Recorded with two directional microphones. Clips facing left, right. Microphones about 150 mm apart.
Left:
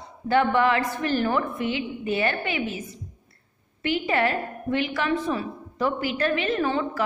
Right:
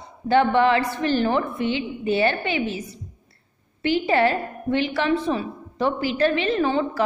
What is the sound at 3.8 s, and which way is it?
A woman's voice, 30° right (ahead or behind).